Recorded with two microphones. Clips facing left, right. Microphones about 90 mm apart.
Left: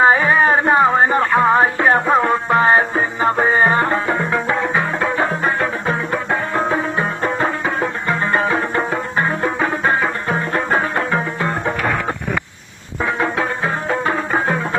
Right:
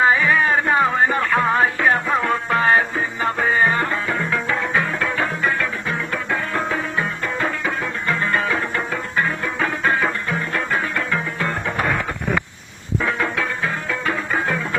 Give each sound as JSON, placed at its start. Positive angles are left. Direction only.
{"t": 0.0, "sound": "music", "side_deg": 30}
{"t": 8.3, "sound": "music", "side_deg": 30}
{"t": 13.9, "sound": "music", "side_deg": 35}